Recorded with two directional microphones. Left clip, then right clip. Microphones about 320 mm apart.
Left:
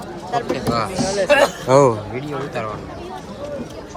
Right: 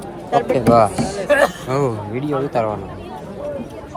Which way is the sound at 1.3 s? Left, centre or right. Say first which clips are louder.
Left 1 dB; centre.